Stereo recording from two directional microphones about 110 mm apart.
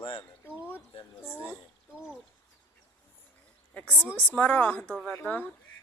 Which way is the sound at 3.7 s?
15° left (ahead or behind).